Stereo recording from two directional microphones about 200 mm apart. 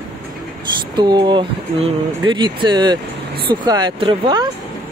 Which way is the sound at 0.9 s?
20° right (ahead or behind).